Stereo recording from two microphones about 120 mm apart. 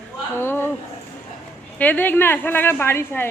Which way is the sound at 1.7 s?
15° left (ahead or behind).